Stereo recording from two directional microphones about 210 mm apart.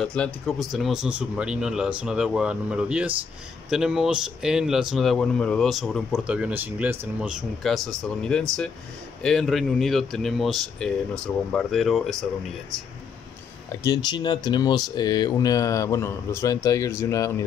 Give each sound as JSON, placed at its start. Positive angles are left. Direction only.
{"t": 0.0, "sound": "a man's voice", "side_deg": 5}
{"t": 13.8, "sound": "speech", "side_deg": 20}